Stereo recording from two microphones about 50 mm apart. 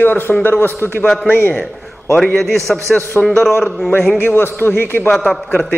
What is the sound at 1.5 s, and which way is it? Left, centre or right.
A man's voice, centre.